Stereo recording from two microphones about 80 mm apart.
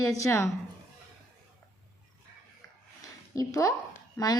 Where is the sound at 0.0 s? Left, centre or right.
Left.